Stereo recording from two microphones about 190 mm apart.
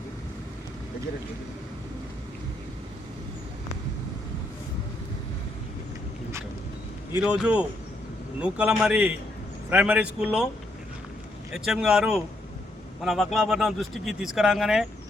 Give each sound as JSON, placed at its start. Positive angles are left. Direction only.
{"t": 7.1, "sound": "a man's voice", "side_deg": -10}
{"t": 11.5, "sound": "speech", "side_deg": 0}